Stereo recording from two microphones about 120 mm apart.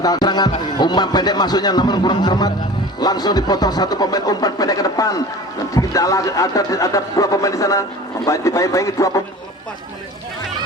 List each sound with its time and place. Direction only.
0.0 s a man's voice: 35° left (ahead or behind)